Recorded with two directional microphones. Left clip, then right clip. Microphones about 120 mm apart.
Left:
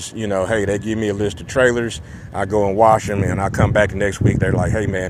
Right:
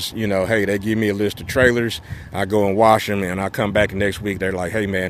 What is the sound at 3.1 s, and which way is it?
Speech, 85° right.